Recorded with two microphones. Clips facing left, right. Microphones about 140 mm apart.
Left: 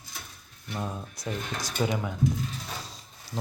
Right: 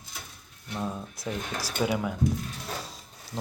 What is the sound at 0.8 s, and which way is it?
Speech, centre (ahead or behind).